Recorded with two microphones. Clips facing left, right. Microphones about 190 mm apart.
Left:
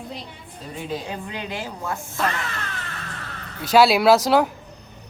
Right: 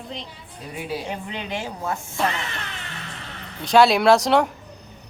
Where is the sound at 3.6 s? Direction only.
5° left (ahead or behind).